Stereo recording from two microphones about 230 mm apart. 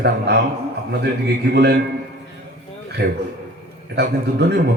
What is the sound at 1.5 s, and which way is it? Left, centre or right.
Speech, right.